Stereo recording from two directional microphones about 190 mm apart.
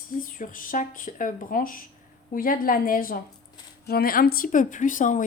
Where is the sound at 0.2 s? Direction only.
45° left (ahead or behind).